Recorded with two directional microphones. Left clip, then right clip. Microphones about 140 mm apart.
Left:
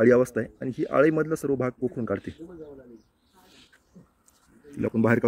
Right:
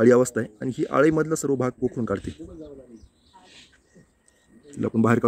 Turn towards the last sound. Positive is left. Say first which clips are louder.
# right 1 dB
turn(degrees=-20)  # may be behind; listen again after turning